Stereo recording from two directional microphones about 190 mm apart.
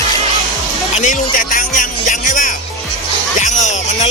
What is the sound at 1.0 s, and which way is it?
Speech, 40° left (ahead or behind).